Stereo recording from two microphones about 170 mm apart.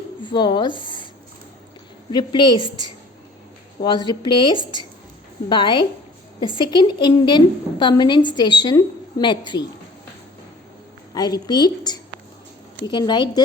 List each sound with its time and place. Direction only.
0.3 s speech: 25° left (ahead or behind)
2.0 s a woman's voice: 25° left (ahead or behind)
3.8 s a woman's voice: 25° left (ahead or behind)
11.1 s a woman's voice: 25° left (ahead or behind)